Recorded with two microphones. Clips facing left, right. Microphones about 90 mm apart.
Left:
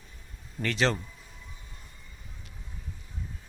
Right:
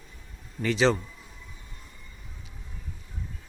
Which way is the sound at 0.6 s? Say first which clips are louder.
Right 4 dB; centre (ahead or behind).